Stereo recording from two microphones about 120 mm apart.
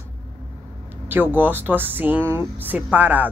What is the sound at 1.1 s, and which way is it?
Speech, 15° right (ahead or behind).